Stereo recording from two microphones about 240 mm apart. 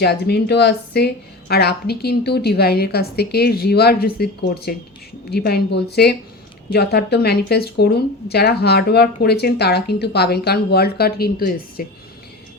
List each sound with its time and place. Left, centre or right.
0.0 s a woman's voice: left